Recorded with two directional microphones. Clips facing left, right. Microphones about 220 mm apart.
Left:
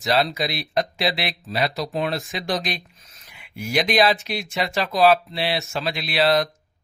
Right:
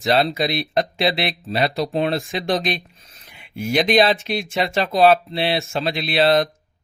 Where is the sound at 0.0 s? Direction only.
25° right (ahead or behind).